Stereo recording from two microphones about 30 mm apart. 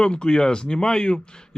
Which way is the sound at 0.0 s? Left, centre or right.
Left.